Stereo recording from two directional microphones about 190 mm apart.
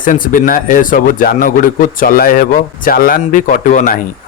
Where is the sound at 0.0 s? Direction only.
45° left (ahead or behind).